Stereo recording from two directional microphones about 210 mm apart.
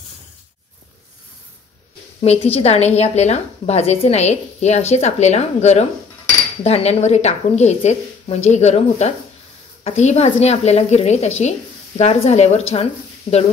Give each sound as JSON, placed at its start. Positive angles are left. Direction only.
{"t": 2.2, "sound": "a woman's voice", "side_deg": 30}